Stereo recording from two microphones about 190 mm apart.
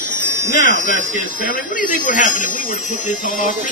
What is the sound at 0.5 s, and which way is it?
Speech, 45° left (ahead or behind).